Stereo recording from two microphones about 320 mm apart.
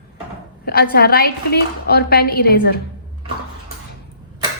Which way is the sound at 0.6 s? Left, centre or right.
Left.